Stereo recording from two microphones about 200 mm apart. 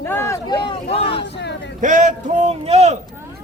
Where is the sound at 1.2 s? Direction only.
60° left (ahead or behind).